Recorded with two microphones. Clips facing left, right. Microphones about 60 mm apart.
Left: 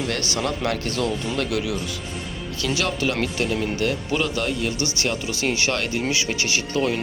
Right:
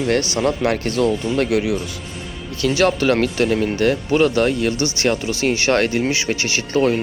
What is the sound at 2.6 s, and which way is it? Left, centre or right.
Speech, right.